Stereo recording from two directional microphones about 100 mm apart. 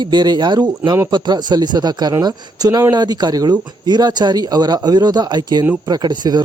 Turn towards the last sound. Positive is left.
turn(degrees=-45)  # may be behind; listen again after turning